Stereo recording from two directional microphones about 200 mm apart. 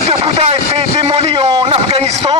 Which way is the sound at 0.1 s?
30° right (ahead or behind).